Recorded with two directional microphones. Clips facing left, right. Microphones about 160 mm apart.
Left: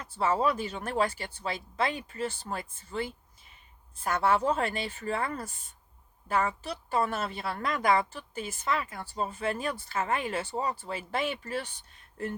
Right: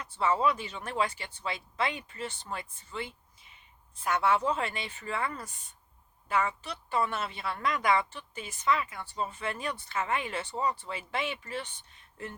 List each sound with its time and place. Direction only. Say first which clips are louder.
0.0 s speech: left 1 dB; 40° left (ahead or behind)